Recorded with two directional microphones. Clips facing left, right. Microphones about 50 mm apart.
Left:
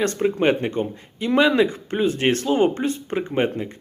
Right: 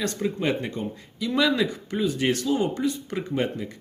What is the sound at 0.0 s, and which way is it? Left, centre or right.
Speech, left.